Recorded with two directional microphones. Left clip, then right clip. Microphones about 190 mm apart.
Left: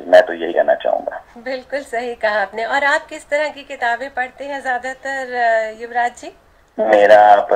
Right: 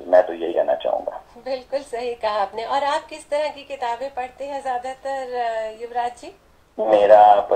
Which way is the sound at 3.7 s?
25° left (ahead or behind).